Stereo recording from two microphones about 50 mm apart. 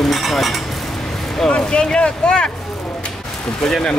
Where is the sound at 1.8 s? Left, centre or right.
Centre.